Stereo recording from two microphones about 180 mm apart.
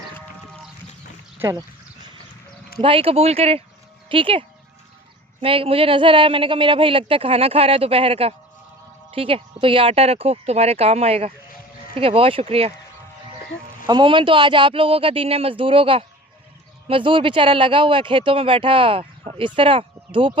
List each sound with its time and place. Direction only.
1.4 s speech: 15° right (ahead or behind)
2.8 s a woman's voice: 30° right (ahead or behind)
13.8 s speech: 25° right (ahead or behind)